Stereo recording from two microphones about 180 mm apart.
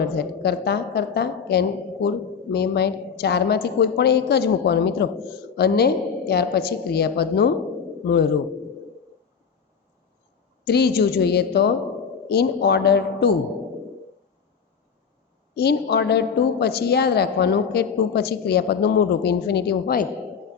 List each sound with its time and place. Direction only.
0.0 s a woman's voice: 65° left (ahead or behind)
10.7 s a woman's voice: 65° left (ahead or behind)
15.5 s a woman's voice: 65° left (ahead or behind)